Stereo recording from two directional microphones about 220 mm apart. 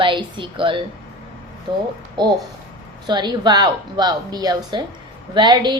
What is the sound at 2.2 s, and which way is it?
A woman's voice, 20° right (ahead or behind).